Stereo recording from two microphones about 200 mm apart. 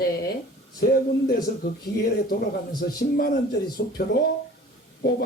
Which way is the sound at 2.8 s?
50° left (ahead or behind).